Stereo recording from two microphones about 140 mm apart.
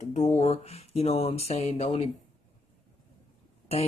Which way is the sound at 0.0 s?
60° left (ahead or behind).